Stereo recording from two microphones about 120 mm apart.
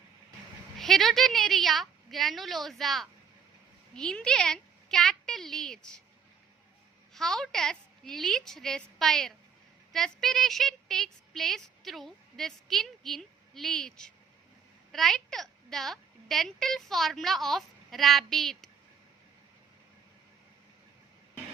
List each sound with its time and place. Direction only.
0.8 s a child's voice: centre (ahead or behind)
7.1 s a child's voice: 5° left (ahead or behind)